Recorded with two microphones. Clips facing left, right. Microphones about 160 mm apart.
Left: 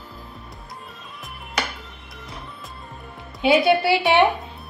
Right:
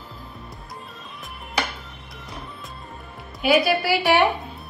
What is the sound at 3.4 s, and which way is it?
Speech, 25° left (ahead or behind).